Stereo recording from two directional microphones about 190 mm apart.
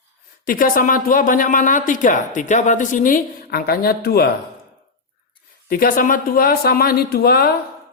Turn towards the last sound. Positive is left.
turn(degrees=55)  # may be behind; listen again after turning